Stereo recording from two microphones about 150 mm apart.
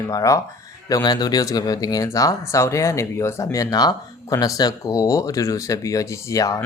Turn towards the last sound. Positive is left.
turn(degrees=25)  # may be behind; listen again after turning